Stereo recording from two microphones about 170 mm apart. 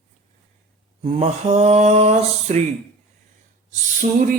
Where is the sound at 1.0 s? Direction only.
40° right (ahead or behind).